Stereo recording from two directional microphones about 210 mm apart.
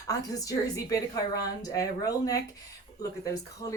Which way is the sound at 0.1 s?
15° left (ahead or behind).